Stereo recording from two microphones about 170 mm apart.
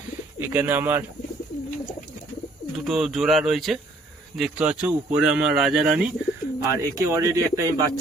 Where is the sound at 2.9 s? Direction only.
Centre (ahead or behind).